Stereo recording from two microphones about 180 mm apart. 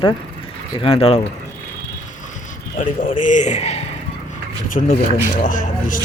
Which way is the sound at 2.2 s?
45° left (ahead or behind).